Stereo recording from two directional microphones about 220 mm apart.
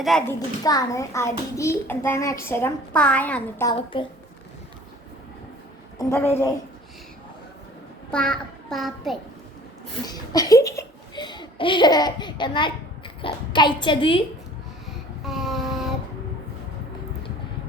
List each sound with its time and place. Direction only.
0.3 s a child's voice: 15° left (ahead or behind)
6.0 s a child's voice: 10° left (ahead or behind)
8.1 s a child's voice: 5° left (ahead or behind)
10.1 s a child's voice: 15° left (ahead or behind)
15.2 s a sound: centre (ahead or behind)